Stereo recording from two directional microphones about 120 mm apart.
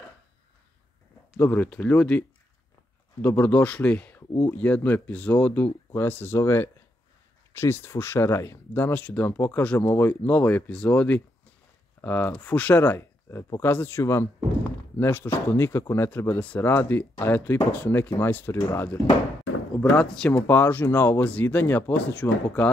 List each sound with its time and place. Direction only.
1.3 s speech: 15° left (ahead or behind)
19.8 s speech: 10° left (ahead or behind)